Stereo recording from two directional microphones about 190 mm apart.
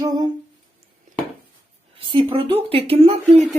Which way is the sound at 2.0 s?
30° right (ahead or behind).